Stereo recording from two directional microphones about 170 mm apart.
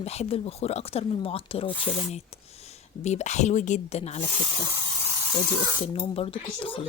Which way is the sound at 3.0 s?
40° left (ahead or behind).